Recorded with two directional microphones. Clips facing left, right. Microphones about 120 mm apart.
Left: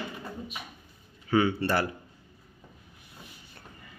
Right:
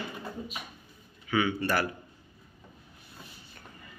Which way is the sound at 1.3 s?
35° left (ahead or behind).